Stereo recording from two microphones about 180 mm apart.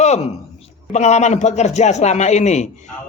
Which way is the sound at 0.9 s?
40° left (ahead or behind).